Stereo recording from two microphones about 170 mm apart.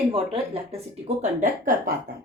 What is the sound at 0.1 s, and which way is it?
Speech, 35° right (ahead or behind).